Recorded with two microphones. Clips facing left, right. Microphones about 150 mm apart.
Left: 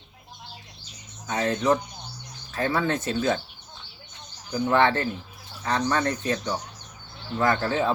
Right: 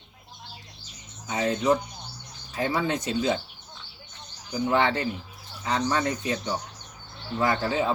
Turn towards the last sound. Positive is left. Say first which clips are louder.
# left 1 dB
turn(degrees=-15)  # may be behind; listen again after turning